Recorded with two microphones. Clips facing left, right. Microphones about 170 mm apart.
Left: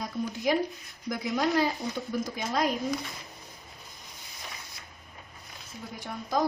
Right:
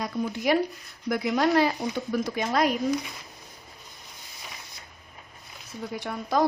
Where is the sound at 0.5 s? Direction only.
70° right (ahead or behind).